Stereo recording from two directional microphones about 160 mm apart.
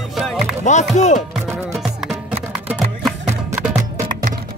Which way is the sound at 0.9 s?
45° left (ahead or behind).